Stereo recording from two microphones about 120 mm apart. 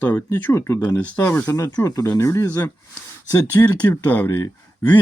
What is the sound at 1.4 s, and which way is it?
Speech, 30° left (ahead or behind).